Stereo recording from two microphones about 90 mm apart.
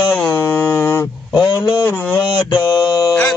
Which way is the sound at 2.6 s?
55° left (ahead or behind).